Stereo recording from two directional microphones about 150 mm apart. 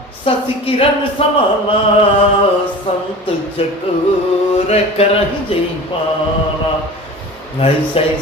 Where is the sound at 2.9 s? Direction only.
40° left (ahead or behind).